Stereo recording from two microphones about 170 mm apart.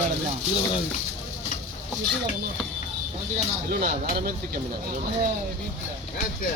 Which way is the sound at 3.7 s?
70° right (ahead or behind).